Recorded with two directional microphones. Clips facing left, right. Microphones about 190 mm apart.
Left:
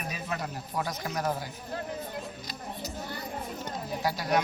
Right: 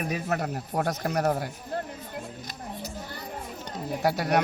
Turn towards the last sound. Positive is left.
turn(degrees=-65)  # may be behind; listen again after turning